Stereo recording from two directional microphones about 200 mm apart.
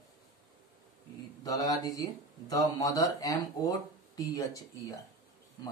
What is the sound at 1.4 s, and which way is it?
Speech, 15° left (ahead or behind).